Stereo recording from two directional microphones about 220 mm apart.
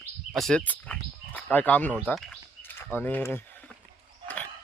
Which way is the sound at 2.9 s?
10° left (ahead or behind).